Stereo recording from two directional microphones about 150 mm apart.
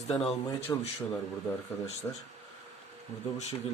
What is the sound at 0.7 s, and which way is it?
Speech, 10° left (ahead or behind).